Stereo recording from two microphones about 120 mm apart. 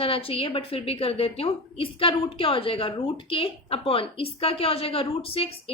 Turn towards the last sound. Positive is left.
turn(degrees=50)  # may be behind; listen again after turning